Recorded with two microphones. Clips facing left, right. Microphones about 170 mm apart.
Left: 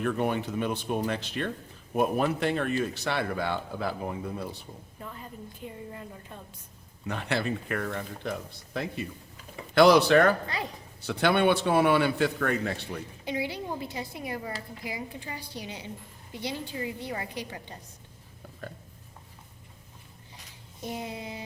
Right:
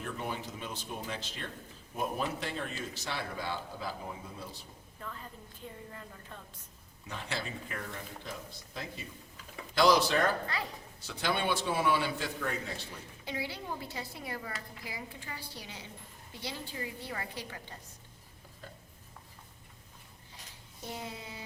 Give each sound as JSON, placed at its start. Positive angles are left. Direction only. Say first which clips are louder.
{"t": 0.0, "sound": "a man's voice", "louder": "left 10 dB", "side_deg": 65}
{"t": 5.0, "sound": "a woman's voice", "louder": "left 3 dB", "side_deg": 15}
{"t": 7.1, "sound": "a man's voice", "louder": "left 9 dB", "side_deg": 65}
{"t": 13.2, "sound": "a woman's voice", "louder": "left 6 dB", "side_deg": 15}
{"t": 20.8, "sound": "a woman's voice", "louder": "left 6 dB", "side_deg": 15}